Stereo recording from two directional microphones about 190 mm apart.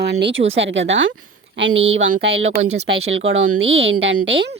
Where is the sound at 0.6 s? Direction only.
75° right (ahead or behind).